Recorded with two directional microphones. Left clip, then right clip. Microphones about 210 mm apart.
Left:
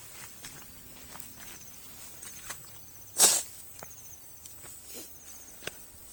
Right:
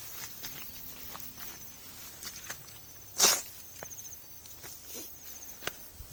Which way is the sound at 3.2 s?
35° left (ahead or behind).